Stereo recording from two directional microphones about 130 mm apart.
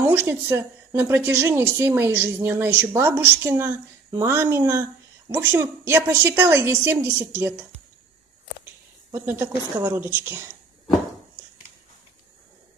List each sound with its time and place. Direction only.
0.0 s a woman's voice: 15° right (ahead or behind)
9.1 s a woman's voice: 15° right (ahead or behind)